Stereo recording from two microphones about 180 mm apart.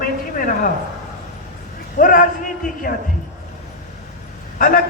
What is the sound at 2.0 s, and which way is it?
Speech, 50° left (ahead or behind).